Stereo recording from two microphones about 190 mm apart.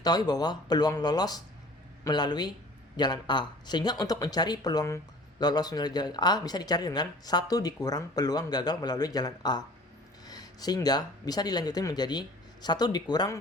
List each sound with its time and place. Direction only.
0.0 s speech: 20° left (ahead or behind)